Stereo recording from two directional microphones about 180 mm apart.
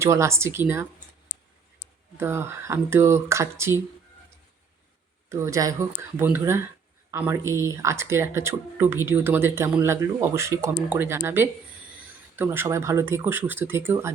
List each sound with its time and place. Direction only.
0.0 s speech: 15° right (ahead or behind)
2.1 s speech: 15° right (ahead or behind)
5.3 s speech: 15° right (ahead or behind)